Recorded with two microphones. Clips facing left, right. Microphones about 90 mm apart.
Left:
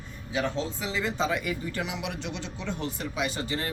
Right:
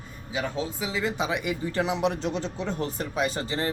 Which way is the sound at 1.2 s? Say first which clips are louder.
Even; 20° right (ahead or behind).